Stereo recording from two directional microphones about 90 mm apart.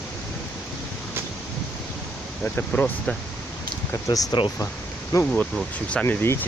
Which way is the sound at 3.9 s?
40° left (ahead or behind).